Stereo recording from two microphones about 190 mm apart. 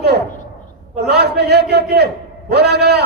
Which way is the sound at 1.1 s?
60° right (ahead or behind).